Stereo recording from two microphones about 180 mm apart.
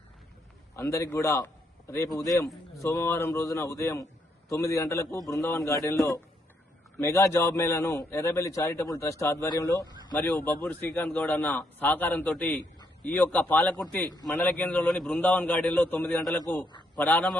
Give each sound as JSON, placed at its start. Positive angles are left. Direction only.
{"t": 0.8, "sound": "a man's voice", "side_deg": 15}